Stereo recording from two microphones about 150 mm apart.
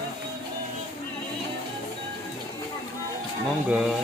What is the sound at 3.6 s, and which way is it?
Speech, 5° right (ahead or behind).